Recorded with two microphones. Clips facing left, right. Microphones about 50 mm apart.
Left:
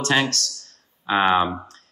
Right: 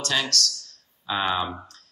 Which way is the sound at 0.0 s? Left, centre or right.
Left.